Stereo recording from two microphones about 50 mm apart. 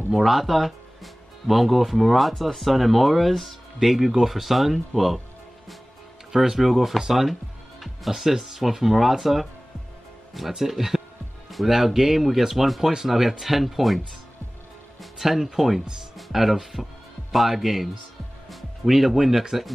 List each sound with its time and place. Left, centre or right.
0.1 s speech: centre
6.3 s speech: centre